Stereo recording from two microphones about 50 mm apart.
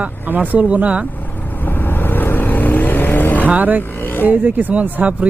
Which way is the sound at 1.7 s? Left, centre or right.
Left.